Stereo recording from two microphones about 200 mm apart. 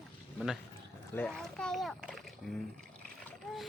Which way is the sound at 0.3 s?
Centre (ahead or behind).